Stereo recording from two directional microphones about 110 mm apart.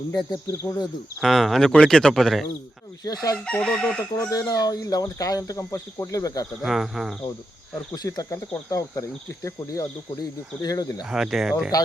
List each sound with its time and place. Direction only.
0.1 s speech: 35° left (ahead or behind)
1.2 s speech: centre (ahead or behind)
3.0 s speech: 35° left (ahead or behind)
3.4 s chicken: 10° left (ahead or behind)
4.3 s speech: 35° left (ahead or behind)
6.6 s speech: 5° right (ahead or behind)
7.9 s speech: 35° left (ahead or behind)
11.1 s speech: 5° right (ahead or behind)